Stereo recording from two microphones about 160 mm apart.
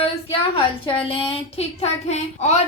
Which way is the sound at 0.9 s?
35° left (ahead or behind).